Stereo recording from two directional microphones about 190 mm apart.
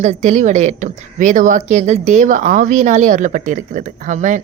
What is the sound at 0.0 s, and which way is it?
A woman's voice, 35° right (ahead or behind).